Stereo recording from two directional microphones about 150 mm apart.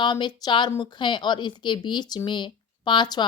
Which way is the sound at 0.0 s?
30° left (ahead or behind).